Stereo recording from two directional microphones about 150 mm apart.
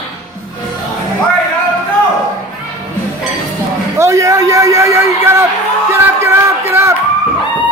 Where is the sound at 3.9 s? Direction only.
20° right (ahead or behind).